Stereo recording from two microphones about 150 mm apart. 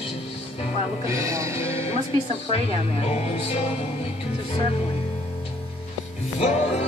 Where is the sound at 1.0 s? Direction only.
20° right (ahead or behind).